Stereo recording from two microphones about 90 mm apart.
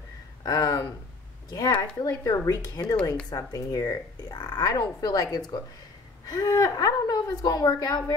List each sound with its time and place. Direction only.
0.5 s speech: 45° left (ahead or behind)